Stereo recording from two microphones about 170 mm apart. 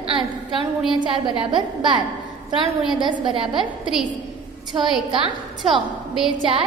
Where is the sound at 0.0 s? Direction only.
30° right (ahead or behind).